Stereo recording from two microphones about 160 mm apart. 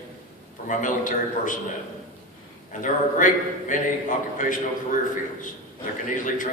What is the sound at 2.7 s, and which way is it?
A man's voice, 55° left (ahead or behind).